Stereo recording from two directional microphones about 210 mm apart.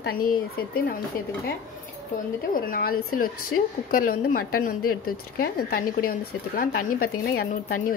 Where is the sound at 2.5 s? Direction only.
45° left (ahead or behind).